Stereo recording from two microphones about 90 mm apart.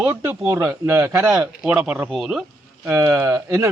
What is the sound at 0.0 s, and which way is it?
Speech, 25° right (ahead or behind).